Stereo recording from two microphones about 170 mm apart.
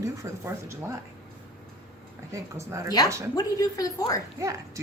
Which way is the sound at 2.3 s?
15° right (ahead or behind).